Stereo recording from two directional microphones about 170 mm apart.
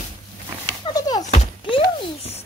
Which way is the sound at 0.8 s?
20° left (ahead or behind).